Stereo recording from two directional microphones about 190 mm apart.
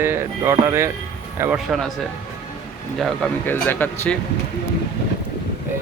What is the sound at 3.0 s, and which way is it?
Speech, 10° left (ahead or behind).